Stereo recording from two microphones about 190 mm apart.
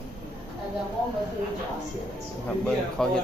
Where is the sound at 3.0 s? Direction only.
5° left (ahead or behind).